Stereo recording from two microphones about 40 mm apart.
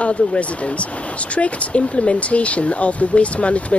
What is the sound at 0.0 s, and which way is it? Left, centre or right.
Speech, left.